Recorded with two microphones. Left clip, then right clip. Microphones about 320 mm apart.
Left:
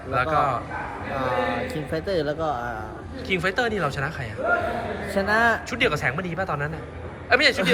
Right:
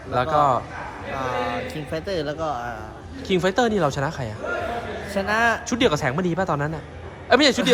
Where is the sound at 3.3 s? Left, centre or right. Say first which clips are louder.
Right 3 dB; centre.